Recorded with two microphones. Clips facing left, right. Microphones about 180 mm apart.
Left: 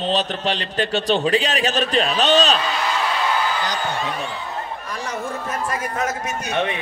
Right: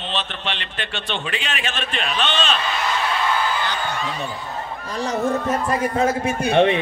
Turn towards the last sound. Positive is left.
turn(degrees=-30)  # may be behind; listen again after turning